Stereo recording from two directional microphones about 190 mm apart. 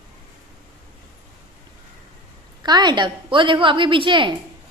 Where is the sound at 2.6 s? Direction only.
20° right (ahead or behind).